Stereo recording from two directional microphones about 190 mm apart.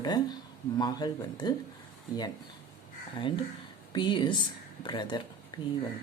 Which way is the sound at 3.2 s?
25° left (ahead or behind).